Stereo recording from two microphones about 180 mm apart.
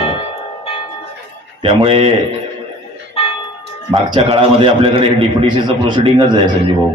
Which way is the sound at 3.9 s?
30° right (ahead or behind).